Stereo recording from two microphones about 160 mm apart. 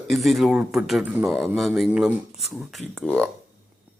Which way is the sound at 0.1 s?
Centre (ahead or behind).